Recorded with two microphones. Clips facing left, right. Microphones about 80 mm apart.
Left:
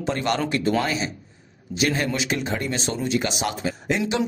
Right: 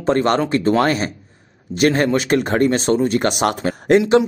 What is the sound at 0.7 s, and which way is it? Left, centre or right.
Speech, right.